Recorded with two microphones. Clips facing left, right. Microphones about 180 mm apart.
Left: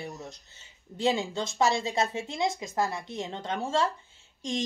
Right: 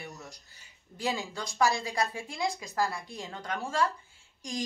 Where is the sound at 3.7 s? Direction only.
25° left (ahead or behind).